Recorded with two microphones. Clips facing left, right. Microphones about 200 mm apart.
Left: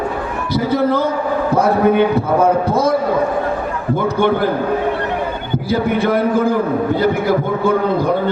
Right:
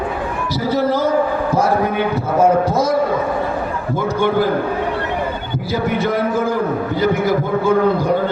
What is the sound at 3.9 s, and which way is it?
Speech, 60° left (ahead or behind).